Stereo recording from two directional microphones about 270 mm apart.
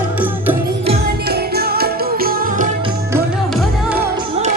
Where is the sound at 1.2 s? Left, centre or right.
Right.